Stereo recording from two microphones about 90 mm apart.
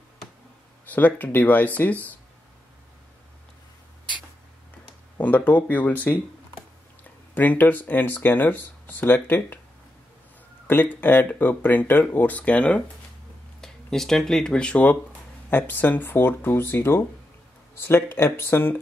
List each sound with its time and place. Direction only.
0.8 s speech: 20° left (ahead or behind)
5.2 s speech: 15° left (ahead or behind)
7.3 s speech: 20° left (ahead or behind)
10.7 s speech: 20° left (ahead or behind)